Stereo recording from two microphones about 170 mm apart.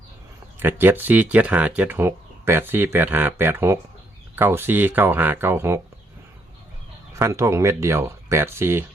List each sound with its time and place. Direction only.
0.6 s speech: 10° right (ahead or behind)
7.2 s speech: 15° right (ahead or behind)